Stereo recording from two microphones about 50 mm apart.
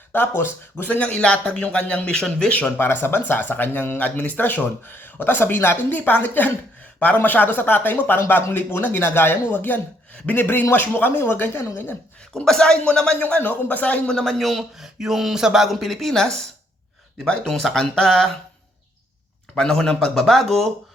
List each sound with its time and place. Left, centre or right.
0.1 s speech: left
0.9 s speech: left
2.8 s speech: left
11.2 s speech: left
12.3 s speech: centre
13.4 s speech: left
14.1 s speech: centre
19.5 s speech: centre